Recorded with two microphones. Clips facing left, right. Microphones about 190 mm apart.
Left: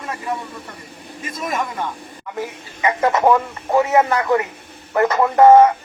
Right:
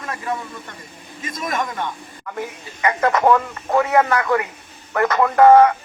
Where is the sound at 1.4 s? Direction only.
Centre (ahead or behind).